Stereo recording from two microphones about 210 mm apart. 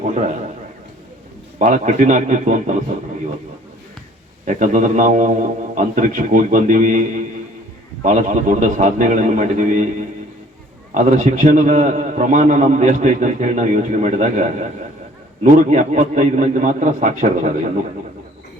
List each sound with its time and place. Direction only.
0.0 s a sound: 35° right (ahead or behind)
1.5 s a man's voice: 35° right (ahead or behind)
4.4 s a man's voice: 35° right (ahead or behind)
10.9 s a man's voice: 35° right (ahead or behind)